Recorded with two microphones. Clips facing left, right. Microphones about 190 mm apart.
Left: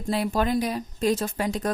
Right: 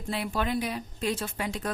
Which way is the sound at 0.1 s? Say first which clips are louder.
Left 6 dB; 40° left (ahead or behind).